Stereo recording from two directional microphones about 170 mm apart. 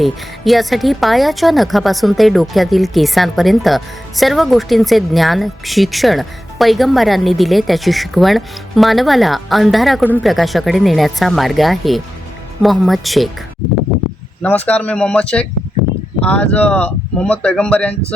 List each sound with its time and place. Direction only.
0.0 s a woman's voice: centre (ahead or behind)
14.4 s speech: 10° left (ahead or behind)